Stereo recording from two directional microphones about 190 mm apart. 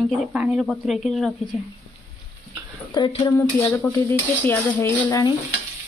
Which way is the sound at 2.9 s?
25° left (ahead or behind).